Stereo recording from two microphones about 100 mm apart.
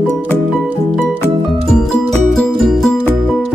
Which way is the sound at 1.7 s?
5° left (ahead or behind).